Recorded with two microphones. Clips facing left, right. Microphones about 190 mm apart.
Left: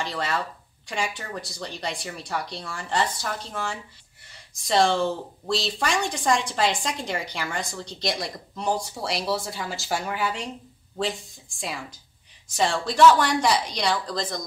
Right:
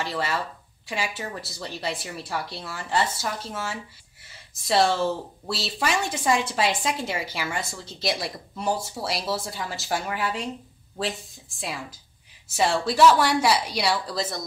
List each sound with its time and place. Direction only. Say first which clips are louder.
0.0 s speech: even; 5° right (ahead or behind)